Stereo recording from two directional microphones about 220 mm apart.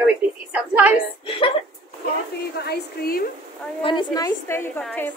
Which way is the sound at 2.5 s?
45° left (ahead or behind).